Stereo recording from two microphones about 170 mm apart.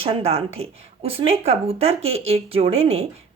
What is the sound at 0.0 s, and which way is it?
Speech, 35° right (ahead or behind).